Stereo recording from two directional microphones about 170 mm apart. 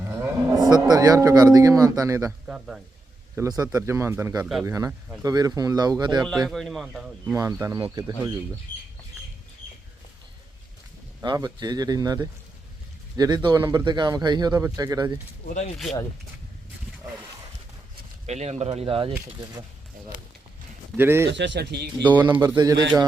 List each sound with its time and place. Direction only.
0.0 s moo: 20° right (ahead or behind)
2.5 s speech: 5° right (ahead or behind)
3.3 s speech: 20° right (ahead or behind)
6.2 s speech: centre (ahead or behind)
7.6 s speech: 15° right (ahead or behind)
11.2 s speech: 25° right (ahead or behind)
18.3 s speech: 40° right (ahead or behind)
20.9 s speech: 15° right (ahead or behind)
21.2 s speech: 90° right
22.2 s speech: 15° right (ahead or behind)